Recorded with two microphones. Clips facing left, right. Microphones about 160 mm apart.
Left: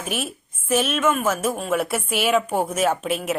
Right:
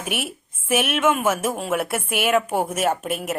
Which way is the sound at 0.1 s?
70° right (ahead or behind).